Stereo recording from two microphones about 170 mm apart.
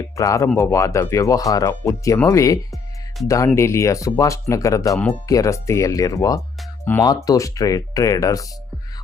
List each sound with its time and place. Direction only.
0.2 s speech: 15° left (ahead or behind)